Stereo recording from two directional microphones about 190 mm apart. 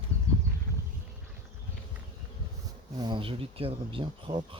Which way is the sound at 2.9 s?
25° right (ahead or behind).